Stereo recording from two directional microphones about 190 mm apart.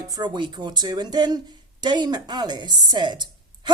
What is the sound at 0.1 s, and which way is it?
Speech, 25° right (ahead or behind).